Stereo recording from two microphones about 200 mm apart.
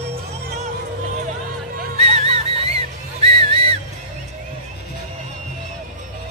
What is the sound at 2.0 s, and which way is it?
Music, 30° right (ahead or behind).